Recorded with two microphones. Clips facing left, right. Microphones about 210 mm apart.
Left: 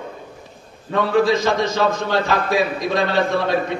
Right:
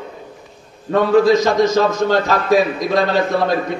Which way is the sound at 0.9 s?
40° right (ahead or behind).